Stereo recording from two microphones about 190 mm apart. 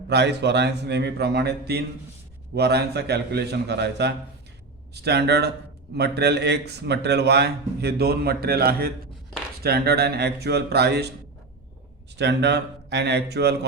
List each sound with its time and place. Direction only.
0.1 s speech: 65° right (ahead or behind)
12.1 s speech: 65° right (ahead or behind)